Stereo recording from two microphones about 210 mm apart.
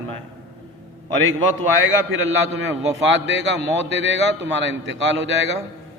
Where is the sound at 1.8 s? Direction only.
65° right (ahead or behind).